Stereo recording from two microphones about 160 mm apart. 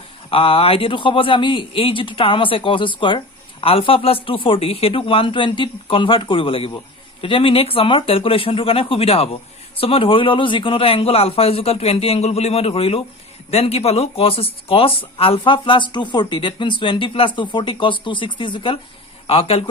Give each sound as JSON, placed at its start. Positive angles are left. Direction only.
{"t": 0.3, "sound": "speech", "side_deg": 35}